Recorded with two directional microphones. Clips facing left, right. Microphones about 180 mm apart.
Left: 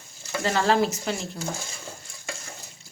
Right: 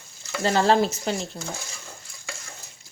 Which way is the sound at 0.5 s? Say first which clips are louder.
Right 2 dB; 30° right (ahead or behind).